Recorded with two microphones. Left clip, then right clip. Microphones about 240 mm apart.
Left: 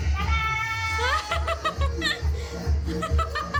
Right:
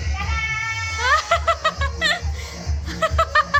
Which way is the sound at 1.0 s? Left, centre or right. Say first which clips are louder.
Right 11 dB; centre.